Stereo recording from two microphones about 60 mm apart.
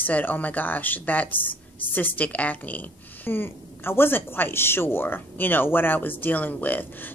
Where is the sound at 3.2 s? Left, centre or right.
Left.